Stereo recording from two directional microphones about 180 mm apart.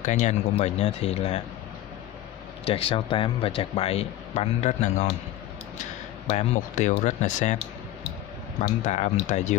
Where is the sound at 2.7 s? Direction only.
30° left (ahead or behind).